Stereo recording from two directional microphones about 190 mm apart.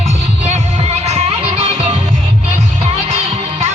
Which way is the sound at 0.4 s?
35° right (ahead or behind).